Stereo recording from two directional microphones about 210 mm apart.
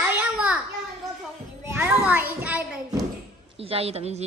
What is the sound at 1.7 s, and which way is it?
Children playing, 10° right (ahead or behind).